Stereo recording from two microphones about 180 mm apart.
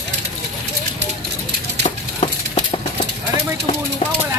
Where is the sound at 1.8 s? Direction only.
30° left (ahead or behind).